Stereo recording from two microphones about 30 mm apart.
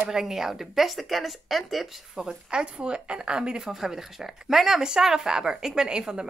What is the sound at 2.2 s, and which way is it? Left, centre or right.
A woman's voice, right.